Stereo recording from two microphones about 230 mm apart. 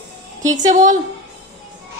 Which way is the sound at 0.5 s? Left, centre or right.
Right.